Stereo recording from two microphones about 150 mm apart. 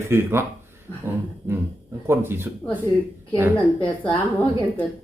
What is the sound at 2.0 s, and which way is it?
Speech, 15° right (ahead or behind).